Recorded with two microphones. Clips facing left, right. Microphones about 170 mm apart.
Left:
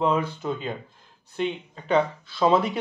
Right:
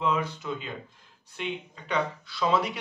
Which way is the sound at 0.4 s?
40° left (ahead or behind).